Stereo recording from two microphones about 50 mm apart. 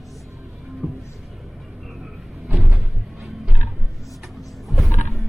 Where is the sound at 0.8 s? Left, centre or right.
Centre.